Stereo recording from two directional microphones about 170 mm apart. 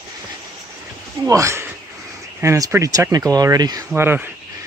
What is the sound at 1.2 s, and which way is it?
Speech, 20° right (ahead or behind).